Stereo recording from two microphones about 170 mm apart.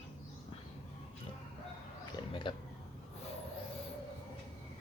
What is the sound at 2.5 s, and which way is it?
Speech, 30° left (ahead or behind).